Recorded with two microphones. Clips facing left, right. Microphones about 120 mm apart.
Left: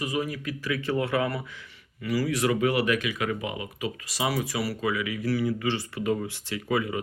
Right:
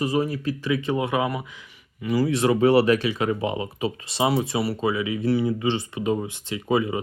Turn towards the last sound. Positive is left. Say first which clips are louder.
# right 4 dB
turn(degrees=-25)  # may be behind; listen again after turning